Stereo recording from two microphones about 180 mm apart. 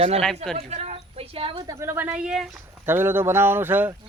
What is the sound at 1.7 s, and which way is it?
Speech, 15° right (ahead or behind).